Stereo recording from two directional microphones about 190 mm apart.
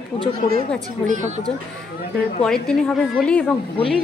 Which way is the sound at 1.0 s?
40° right (ahead or behind).